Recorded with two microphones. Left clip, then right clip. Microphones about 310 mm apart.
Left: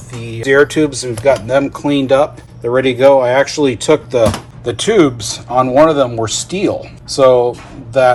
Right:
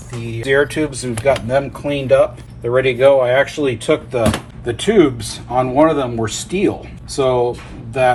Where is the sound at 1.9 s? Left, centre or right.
Centre.